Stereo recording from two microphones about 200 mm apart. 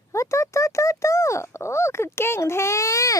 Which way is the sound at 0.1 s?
15° left (ahead or behind).